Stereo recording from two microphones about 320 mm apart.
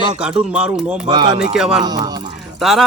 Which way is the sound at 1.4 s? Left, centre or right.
Centre.